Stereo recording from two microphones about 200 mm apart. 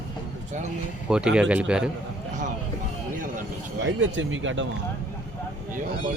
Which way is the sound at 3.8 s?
75° right (ahead or behind).